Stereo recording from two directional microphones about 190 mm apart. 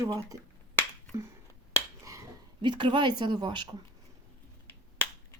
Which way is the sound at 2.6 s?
25° right (ahead or behind).